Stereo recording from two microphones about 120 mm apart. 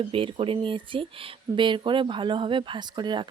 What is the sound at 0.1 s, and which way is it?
Speech, 45° right (ahead or behind).